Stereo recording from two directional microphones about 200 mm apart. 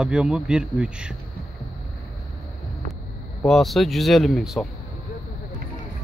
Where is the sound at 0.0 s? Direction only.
5° right (ahead or behind).